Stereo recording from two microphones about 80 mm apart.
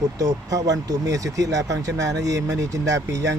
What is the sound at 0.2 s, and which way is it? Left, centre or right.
Speech, right.